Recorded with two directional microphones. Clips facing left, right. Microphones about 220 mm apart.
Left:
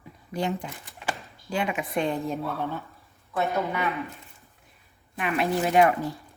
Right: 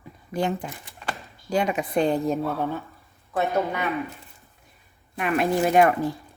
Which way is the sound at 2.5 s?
15° right (ahead or behind).